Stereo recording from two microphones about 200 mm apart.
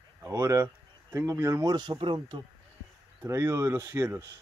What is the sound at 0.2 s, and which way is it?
Speech, 15° right (ahead or behind).